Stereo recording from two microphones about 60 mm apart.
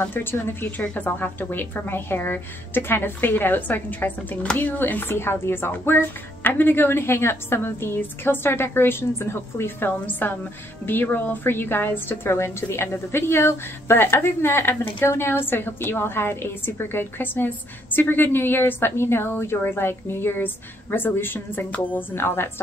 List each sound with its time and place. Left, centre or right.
0.1 s a woman's voice: left